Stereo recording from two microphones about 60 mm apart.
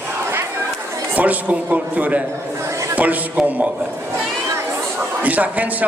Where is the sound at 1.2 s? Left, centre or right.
Right.